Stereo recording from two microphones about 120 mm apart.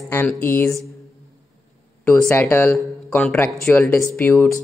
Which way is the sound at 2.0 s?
10° left (ahead or behind).